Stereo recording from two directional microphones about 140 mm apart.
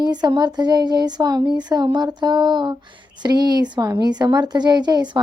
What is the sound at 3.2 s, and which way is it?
A woman's voice, 30° right (ahead or behind).